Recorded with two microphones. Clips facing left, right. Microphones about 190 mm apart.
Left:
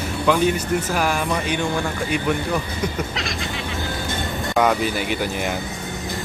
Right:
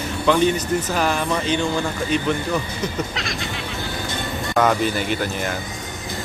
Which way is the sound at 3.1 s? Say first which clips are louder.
Left 1 dB; centre (ahead or behind).